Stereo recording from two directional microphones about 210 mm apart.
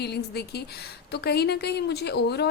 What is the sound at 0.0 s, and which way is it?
A woman's voice, 50° left (ahead or behind).